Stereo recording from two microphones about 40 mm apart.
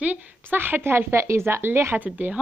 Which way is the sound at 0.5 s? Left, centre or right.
Right.